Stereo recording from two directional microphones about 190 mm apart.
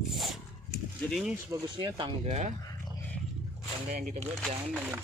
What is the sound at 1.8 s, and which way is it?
Speech, 25° right (ahead or behind).